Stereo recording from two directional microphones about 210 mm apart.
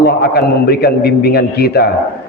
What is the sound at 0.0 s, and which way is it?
A man's voice, 50° left (ahead or behind).